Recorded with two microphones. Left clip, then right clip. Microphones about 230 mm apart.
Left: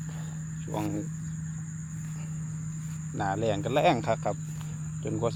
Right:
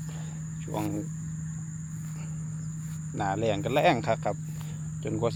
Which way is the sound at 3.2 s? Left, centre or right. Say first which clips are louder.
Right 1 dB; centre.